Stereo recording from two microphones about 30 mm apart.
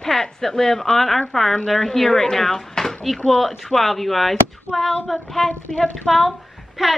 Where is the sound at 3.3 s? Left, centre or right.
Centre.